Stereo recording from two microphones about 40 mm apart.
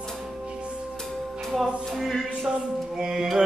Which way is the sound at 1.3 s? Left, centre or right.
Centre.